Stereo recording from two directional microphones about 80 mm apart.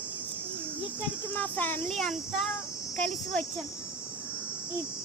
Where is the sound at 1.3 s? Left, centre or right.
Left.